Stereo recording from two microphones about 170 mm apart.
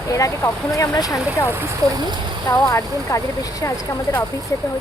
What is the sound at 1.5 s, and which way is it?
Speech, 15° right (ahead or behind).